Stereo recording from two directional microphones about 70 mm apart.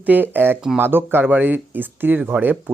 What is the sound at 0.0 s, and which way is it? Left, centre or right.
Speech, right.